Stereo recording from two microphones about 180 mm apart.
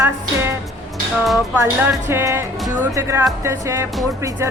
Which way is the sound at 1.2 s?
Centre (ahead or behind).